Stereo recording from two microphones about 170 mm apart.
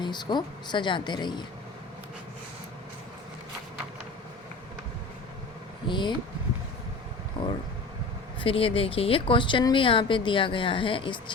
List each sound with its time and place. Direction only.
0.0 s speech: 25° left (ahead or behind)
5.9 s speech: 30° left (ahead or behind)
7.4 s vehicle: 30° left (ahead or behind)
8.4 s speech: 35° left (ahead or behind)